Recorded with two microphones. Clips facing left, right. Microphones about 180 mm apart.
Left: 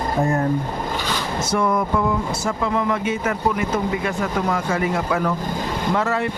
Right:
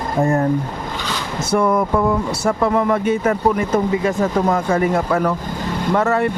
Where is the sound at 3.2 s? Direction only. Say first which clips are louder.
Right 4 dB; 35° right (ahead or behind); by 6.3 s 50° right (ahead or behind).